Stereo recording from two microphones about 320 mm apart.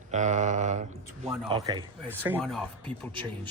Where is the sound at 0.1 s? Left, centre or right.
Right.